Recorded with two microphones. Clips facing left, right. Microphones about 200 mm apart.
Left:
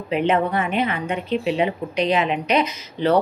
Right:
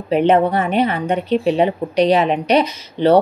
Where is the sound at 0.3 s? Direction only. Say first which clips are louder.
Right 5 dB; 35° right (ahead or behind).